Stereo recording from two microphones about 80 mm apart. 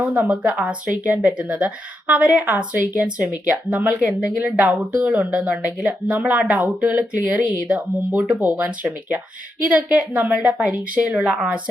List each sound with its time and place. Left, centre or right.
0.0 s a woman's voice: centre